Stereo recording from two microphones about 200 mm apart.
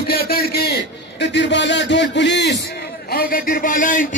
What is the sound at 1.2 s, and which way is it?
A man's voice, 60° left (ahead or behind).